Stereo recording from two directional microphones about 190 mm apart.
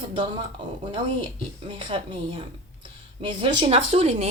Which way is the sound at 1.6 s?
25° right (ahead or behind).